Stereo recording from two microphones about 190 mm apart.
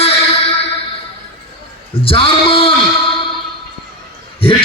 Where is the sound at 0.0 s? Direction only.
30° left (ahead or behind).